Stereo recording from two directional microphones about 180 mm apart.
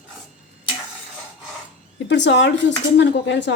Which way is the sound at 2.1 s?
85° left.